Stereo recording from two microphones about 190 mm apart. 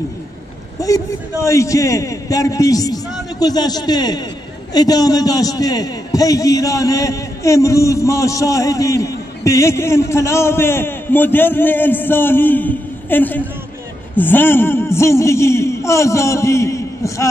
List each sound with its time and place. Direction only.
0.7 s a man's voice: 15° left (ahead or behind)